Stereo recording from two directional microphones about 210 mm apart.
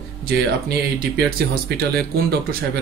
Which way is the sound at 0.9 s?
50° right (ahead or behind).